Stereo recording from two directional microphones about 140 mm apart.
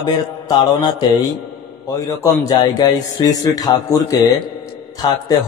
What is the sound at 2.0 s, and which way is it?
A man's voice, 25° left (ahead or behind).